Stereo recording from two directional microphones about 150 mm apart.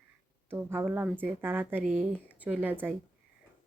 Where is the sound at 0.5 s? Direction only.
15° right (ahead or behind).